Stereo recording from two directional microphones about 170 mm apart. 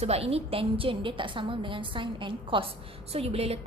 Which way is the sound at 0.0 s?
35° right (ahead or behind).